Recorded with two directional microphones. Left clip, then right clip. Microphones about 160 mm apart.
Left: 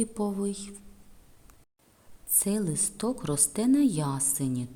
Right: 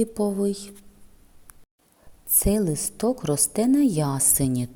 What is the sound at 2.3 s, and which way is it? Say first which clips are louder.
A woman's voice: right 7 dB; 25° right (ahead or behind).